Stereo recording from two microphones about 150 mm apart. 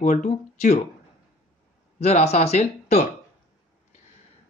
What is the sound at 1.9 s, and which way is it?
Speech, 45° left (ahead or behind).